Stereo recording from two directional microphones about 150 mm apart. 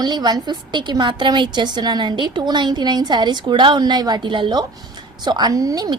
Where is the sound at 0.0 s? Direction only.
30° right (ahead or behind).